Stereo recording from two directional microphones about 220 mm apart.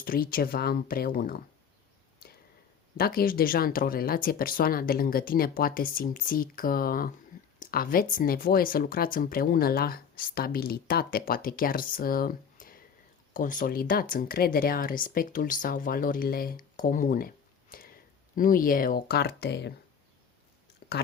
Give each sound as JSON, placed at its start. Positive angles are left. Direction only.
{"t": 0.0, "sound": "speech", "side_deg": 40}
{"t": 3.0, "sound": "speech", "side_deg": 40}